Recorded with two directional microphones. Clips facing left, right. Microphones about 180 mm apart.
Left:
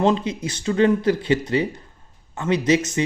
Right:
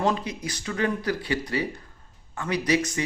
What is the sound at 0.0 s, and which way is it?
Speech, 25° left (ahead or behind).